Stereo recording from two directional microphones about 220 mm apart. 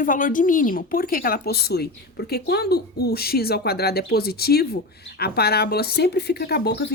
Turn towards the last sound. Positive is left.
turn(degrees=50)  # may be behind; listen again after turning